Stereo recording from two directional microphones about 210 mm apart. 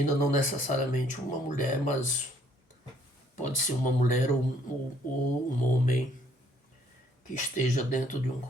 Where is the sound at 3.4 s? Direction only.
35° left (ahead or behind).